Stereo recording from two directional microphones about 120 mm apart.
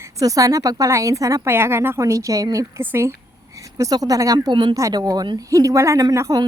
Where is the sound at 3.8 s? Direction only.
30° right (ahead or behind).